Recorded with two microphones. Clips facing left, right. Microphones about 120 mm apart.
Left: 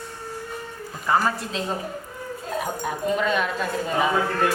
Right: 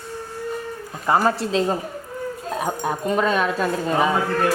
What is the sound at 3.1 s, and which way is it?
Speech, 40° right (ahead or behind).